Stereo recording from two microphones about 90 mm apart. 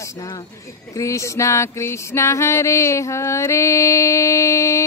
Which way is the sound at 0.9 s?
35° left (ahead or behind).